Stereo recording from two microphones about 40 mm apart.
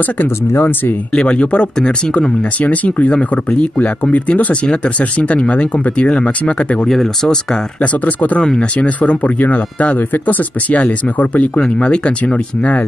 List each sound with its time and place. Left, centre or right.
0.6 s speech: left
1.1 s speech: left
2.6 s speech: left
3.2 s speech: left
6.9 s speech: centre
7.8 s speech: left
8.4 s speech: left
8.7 s speech: left
9.9 s speech: left
10.7 s speech: left